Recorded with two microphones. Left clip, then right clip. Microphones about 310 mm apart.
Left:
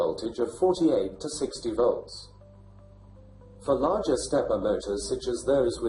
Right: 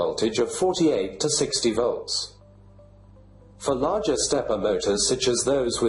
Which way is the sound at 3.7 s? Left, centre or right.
Right.